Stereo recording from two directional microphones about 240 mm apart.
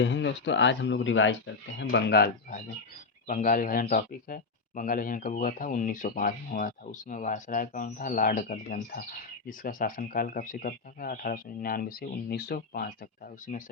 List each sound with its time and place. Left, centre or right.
0.0 s speech: left